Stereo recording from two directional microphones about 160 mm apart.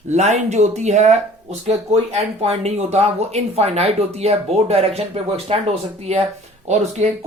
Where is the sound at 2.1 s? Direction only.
40° right (ahead or behind).